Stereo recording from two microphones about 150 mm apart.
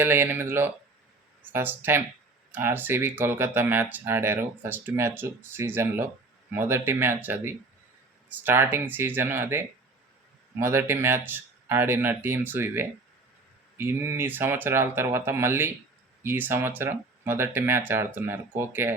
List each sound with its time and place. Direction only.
0.0 s speech: 15° right (ahead or behind)